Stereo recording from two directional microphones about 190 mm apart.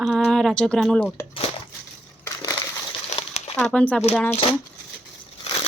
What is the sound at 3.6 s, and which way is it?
Speech, 5° left (ahead or behind).